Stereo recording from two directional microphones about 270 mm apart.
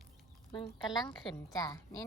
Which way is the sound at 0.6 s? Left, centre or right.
Centre.